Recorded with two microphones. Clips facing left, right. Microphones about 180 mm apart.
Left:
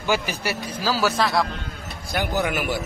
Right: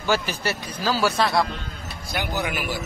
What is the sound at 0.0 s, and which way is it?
A man's voice, 10° left (ahead or behind).